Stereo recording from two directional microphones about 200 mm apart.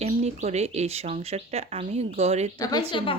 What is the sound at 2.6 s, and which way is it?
Speech, 20° left (ahead or behind).